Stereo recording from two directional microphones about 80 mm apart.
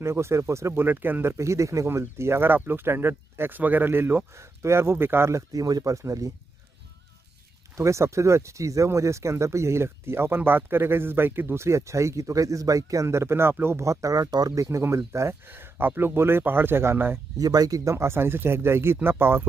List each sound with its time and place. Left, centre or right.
0.0 s speech: right
1.3 s speech: right
5.5 s speech: right
7.7 s speech: right
15.4 s speech: right
17.4 s speech: right